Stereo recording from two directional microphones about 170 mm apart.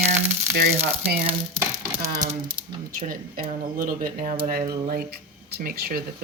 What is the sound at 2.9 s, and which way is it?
Speech, 55° right (ahead or behind).